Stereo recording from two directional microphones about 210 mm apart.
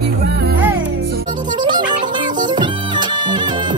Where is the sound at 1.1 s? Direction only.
40° right (ahead or behind).